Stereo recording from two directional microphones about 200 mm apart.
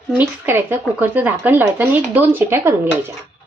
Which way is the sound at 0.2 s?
10° right (ahead or behind).